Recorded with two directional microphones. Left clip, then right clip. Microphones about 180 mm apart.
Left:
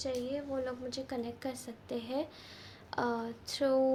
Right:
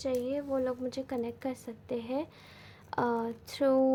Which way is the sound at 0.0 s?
50° right (ahead or behind).